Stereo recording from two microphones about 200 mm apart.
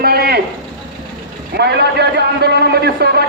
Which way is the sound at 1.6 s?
55° right (ahead or behind).